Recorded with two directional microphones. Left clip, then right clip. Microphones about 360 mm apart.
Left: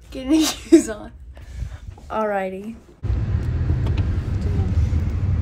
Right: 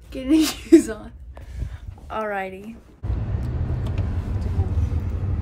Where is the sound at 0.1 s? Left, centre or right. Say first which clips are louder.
Even; centre.